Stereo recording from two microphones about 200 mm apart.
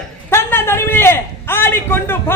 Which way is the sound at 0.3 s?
10° left (ahead or behind).